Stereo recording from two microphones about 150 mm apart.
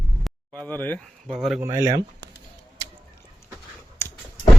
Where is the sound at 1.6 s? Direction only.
20° right (ahead or behind).